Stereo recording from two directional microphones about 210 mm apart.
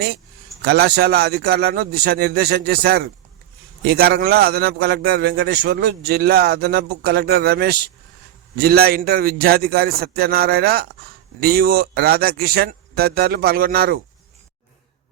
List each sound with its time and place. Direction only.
0.6 s a man's voice: 50° right (ahead or behind)